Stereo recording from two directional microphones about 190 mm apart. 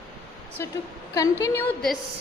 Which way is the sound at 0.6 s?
15° left (ahead or behind).